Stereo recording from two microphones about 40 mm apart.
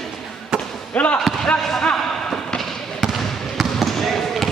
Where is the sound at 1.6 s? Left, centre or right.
Centre.